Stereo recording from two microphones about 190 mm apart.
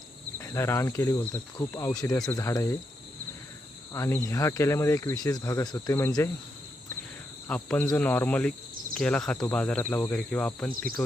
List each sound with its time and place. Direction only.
0.3 s speech: 15° left (ahead or behind)
3.9 s speech: 15° left (ahead or behind)
7.4 s speech: 5° left (ahead or behind)
10.7 s speech: 50° right (ahead or behind)